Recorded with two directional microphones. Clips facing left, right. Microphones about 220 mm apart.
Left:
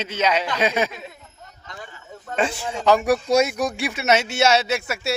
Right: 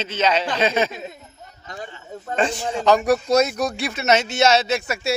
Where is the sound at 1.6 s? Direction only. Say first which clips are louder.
Right 5 dB; 35° right (ahead or behind).